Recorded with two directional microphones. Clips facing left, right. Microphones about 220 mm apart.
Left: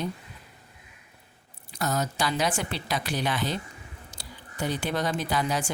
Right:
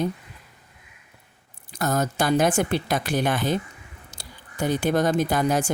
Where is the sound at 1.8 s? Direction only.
50° right (ahead or behind).